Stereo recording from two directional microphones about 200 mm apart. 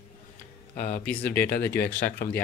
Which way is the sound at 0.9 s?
10° left (ahead or behind).